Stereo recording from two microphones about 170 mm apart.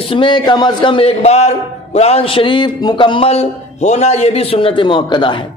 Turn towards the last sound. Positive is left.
turn(degrees=30)  # may be behind; listen again after turning